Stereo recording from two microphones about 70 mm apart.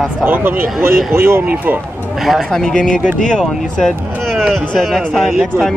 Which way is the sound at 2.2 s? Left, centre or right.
Centre.